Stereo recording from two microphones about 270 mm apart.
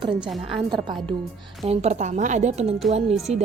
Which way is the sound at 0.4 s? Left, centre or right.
Centre.